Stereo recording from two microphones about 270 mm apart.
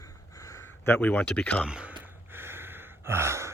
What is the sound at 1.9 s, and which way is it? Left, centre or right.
Sigh, centre.